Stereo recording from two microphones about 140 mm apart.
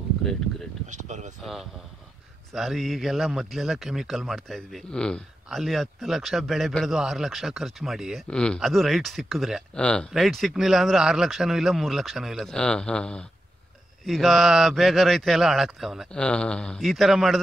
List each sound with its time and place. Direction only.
0.8 s speech: 60° right (ahead or behind)
1.4 s a man's voice: centre (ahead or behind)